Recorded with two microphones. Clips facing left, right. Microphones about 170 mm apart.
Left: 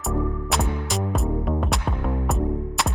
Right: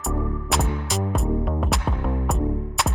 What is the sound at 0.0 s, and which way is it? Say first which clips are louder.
Music: left 1 dB; centre (ahead or behind).